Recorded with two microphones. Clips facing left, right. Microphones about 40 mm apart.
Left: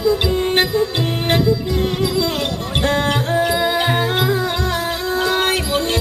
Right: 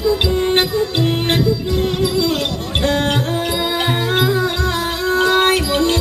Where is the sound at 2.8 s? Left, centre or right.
Left.